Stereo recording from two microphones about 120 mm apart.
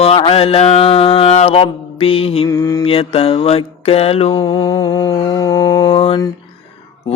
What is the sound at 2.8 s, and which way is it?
Mantra, 50° left (ahead or behind).